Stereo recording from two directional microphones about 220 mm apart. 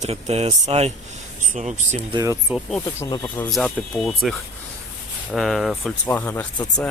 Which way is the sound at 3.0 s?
10° left (ahead or behind).